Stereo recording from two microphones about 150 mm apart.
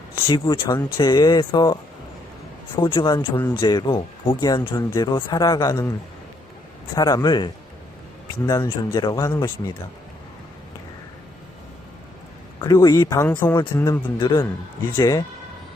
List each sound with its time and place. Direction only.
0.3 s speech: 30° left (ahead or behind)
2.8 s speech: 30° left (ahead or behind)
6.9 s speech: 25° left (ahead or behind)
12.6 s speech: 25° left (ahead or behind)
14.2 s speech: 25° left (ahead or behind)